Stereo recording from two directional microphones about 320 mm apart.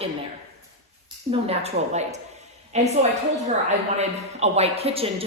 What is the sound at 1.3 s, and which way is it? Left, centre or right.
A woman's voice, centre.